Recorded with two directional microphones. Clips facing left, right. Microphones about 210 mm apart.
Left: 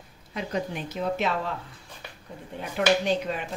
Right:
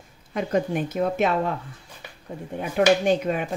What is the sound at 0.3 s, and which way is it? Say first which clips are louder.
Speech: right 7 dB; 50° right (ahead or behind).